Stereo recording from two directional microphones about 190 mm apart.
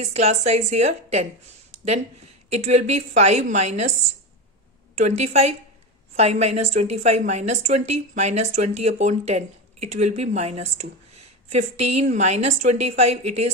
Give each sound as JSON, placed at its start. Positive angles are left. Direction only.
{"t": 0.0, "sound": "speech", "side_deg": -35}
{"t": 4.9, "sound": "speech", "side_deg": -35}